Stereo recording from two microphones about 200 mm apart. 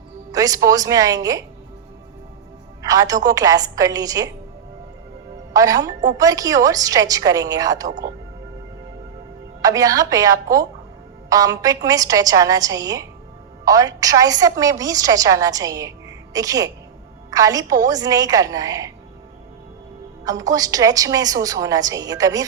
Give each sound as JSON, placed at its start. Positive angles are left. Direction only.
{"t": 0.3, "sound": "a woman's voice", "side_deg": -20}
{"t": 2.8, "sound": "a woman's voice", "side_deg": -20}
{"t": 5.5, "sound": "a woman's voice", "side_deg": -15}
{"t": 9.6, "sound": "a woman's voice", "side_deg": -15}
{"t": 20.2, "sound": "a woman's voice", "side_deg": -20}